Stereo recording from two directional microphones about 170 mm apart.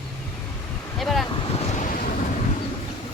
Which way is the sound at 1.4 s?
40° left (ahead or behind).